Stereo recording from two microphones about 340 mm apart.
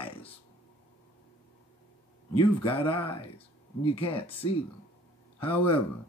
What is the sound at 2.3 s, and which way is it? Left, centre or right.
Speech, centre.